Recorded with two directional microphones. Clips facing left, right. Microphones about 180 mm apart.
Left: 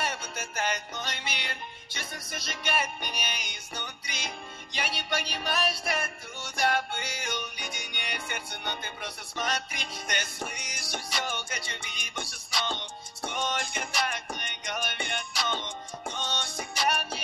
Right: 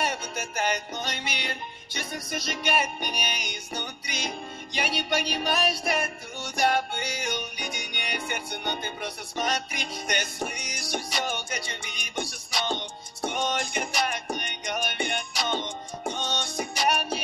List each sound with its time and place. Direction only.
0.0 s music: 15° right (ahead or behind)